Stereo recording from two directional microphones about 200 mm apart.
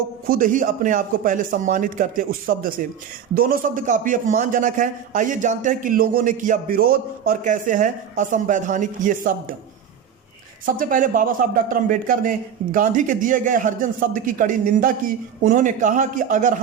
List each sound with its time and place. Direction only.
0.3 s a man's voice: 40° right (ahead or behind)
10.8 s a man's voice: 45° right (ahead or behind)